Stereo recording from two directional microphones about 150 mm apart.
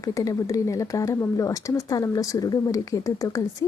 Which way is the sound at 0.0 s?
20° left (ahead or behind).